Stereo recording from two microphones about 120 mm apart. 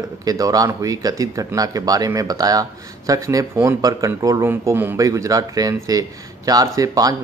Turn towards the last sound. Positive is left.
turn(degrees=-30)  # may be behind; listen again after turning